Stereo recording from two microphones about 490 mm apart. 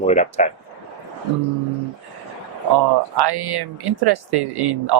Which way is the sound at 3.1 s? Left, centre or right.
Right.